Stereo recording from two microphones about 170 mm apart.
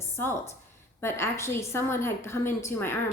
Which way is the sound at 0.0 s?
15° left (ahead or behind).